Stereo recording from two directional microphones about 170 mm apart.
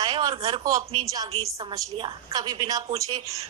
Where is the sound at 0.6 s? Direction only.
20° right (ahead or behind).